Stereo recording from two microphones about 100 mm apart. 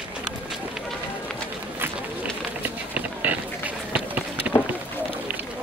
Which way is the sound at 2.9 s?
15° right (ahead or behind).